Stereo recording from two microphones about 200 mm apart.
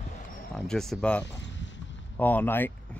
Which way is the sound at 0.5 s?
Centre (ahead or behind).